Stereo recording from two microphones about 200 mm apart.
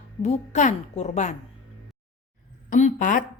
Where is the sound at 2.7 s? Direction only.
40° left (ahead or behind).